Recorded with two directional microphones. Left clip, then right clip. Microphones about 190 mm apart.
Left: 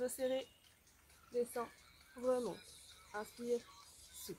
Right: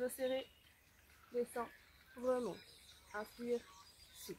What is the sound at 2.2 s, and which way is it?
Speech, 20° left (ahead or behind).